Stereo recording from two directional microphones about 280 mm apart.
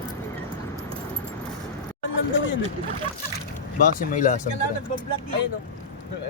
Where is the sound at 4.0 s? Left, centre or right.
Left.